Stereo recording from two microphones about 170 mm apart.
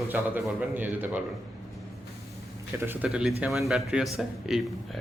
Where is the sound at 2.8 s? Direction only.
15° right (ahead or behind).